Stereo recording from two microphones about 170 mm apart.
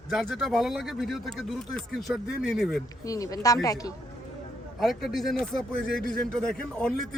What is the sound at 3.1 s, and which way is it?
Speech, 20° left (ahead or behind).